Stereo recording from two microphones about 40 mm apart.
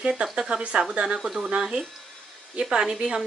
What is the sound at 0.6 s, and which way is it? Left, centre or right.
A woman's voice, right.